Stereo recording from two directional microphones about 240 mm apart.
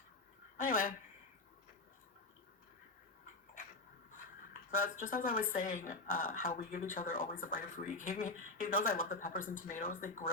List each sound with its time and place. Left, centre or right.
0.5 s speech: left
4.7 s speech: left